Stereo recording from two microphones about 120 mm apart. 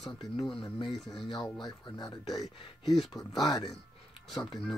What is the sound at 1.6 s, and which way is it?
Speech, 35° left (ahead or behind).